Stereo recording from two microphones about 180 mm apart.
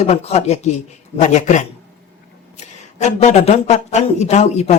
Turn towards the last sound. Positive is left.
turn(degrees=40)  # may be behind; listen again after turning